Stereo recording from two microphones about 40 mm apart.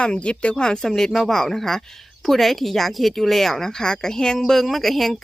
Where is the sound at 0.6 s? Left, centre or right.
Centre.